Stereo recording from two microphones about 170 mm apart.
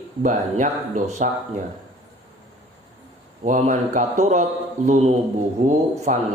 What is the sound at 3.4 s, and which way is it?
A man's voice, 50° right (ahead or behind).